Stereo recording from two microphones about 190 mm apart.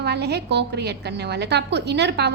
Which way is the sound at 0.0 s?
60° right (ahead or behind).